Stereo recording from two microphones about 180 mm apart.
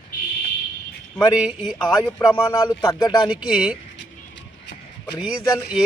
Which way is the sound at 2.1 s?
10° left (ahead or behind).